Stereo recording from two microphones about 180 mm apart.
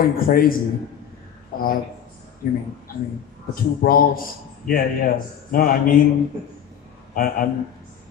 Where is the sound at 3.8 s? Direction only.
55° left (ahead or behind).